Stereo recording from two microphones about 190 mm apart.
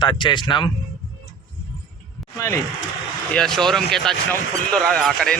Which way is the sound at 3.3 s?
5° left (ahead or behind).